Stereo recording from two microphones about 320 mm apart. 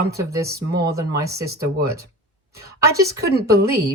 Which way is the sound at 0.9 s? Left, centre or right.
Centre.